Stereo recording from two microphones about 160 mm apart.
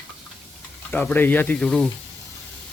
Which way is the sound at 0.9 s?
10° left (ahead or behind).